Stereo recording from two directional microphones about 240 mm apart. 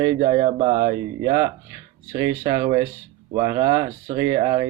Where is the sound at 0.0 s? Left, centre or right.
Right.